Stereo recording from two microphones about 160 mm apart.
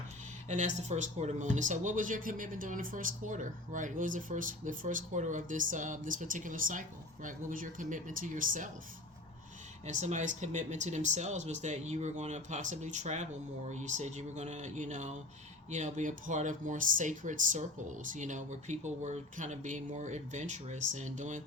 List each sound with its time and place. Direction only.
0.4 s speech: 50° right (ahead or behind)
9.8 s speech: 45° right (ahead or behind)